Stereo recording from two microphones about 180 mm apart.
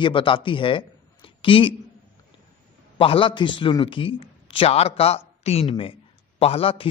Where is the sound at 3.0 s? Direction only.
30° left (ahead or behind).